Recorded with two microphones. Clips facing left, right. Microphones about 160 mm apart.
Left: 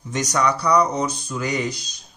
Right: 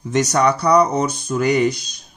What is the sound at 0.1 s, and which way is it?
Speech, 60° right (ahead or behind).